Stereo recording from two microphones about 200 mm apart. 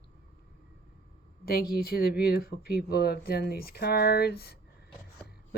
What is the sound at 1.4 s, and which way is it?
Speech, 50° left (ahead or behind).